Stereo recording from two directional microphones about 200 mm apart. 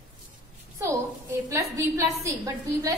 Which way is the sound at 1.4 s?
15° right (ahead or behind).